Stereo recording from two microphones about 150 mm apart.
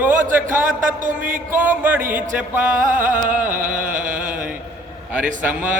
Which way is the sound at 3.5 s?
60° right (ahead or behind).